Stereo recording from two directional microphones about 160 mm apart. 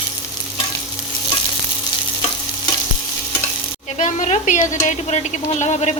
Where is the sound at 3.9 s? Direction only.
45° left (ahead or behind).